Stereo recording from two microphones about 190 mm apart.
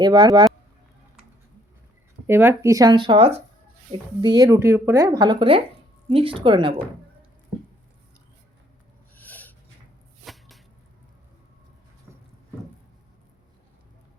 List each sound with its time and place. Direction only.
0.0 s speech: 20° right (ahead or behind)
2.2 s speech: 10° right (ahead or behind)
9.1 s a sound: 10° left (ahead or behind)
10.2 s whip: centre (ahead or behind)